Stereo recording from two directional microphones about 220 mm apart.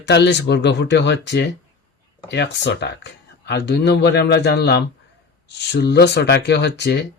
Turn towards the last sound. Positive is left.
turn(degrees=50)  # may be behind; listen again after turning